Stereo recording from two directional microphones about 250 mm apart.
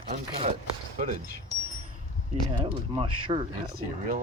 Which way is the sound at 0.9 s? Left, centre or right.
Right.